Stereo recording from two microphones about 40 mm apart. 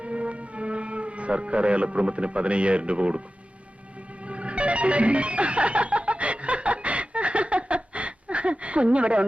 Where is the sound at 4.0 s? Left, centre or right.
Right.